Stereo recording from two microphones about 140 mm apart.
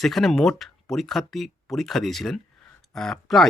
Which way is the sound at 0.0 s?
Centre (ahead or behind).